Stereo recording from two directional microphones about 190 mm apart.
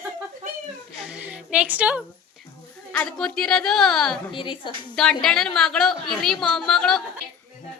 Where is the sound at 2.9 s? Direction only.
5° left (ahead or behind).